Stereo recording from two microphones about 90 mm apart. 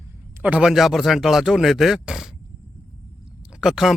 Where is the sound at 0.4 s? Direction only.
15° right (ahead or behind).